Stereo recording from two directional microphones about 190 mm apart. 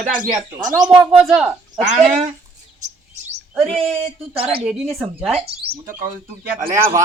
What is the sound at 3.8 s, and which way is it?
Speech, 30° right (ahead or behind).